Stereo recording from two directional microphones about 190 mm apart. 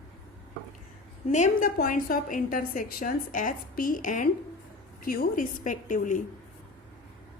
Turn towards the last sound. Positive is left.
turn(degrees=45)  # may be behind; listen again after turning